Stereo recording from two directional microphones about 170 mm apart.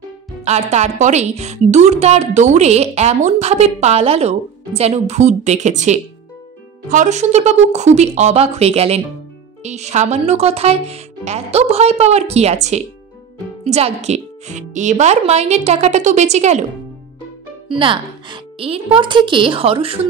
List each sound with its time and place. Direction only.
0.5 s a woman's voice: 40° right (ahead or behind)
17.6 s a woman's voice: 30° right (ahead or behind)